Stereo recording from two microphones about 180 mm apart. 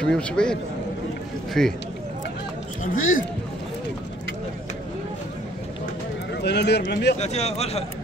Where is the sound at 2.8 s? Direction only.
50° left (ahead or behind).